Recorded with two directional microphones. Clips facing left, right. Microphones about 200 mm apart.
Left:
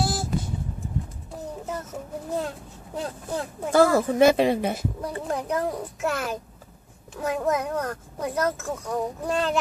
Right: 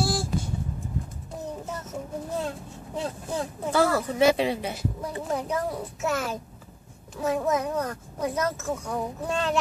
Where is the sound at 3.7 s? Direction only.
50° left (ahead or behind).